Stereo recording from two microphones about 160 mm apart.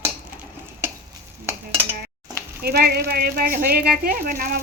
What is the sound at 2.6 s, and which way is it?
Speech, 80° right.